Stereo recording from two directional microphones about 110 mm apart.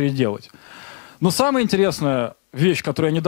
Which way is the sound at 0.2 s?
15° left (ahead or behind).